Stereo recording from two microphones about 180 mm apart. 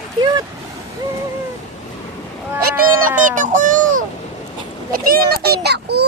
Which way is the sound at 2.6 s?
50° right (ahead or behind).